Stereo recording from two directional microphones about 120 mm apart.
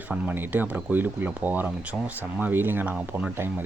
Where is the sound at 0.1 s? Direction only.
15° right (ahead or behind).